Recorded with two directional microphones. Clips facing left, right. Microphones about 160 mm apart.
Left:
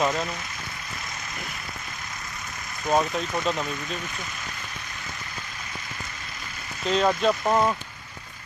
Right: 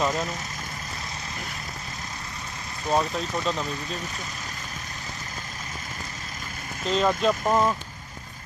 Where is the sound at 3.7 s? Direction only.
35° right (ahead or behind).